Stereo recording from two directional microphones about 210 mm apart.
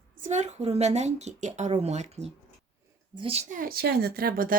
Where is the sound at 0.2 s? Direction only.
35° right (ahead or behind).